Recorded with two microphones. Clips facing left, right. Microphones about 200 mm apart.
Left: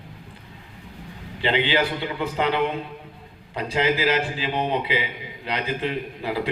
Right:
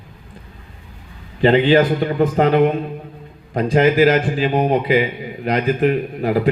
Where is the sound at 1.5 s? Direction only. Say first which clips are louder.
Right 9 dB; 45° right (ahead or behind).